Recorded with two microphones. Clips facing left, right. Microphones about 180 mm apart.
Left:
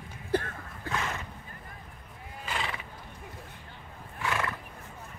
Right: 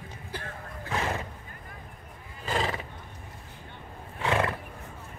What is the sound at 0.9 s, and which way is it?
Horse, 30° right (ahead or behind).